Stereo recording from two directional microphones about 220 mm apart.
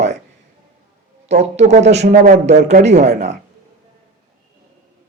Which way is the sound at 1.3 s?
30° right (ahead or behind).